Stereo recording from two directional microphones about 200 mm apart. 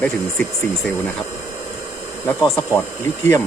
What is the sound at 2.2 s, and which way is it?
Speech, 10° left (ahead or behind).